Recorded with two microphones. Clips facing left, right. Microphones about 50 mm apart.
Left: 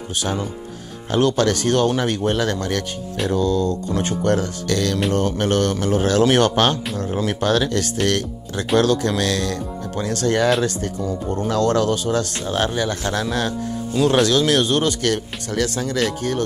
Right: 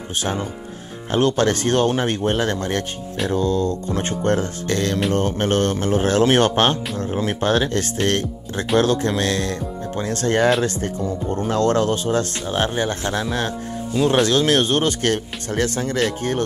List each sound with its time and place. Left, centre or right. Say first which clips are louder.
0.1 s speech: even; right